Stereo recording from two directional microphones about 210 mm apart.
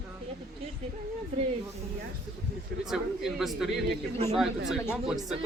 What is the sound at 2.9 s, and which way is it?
Speech, centre (ahead or behind).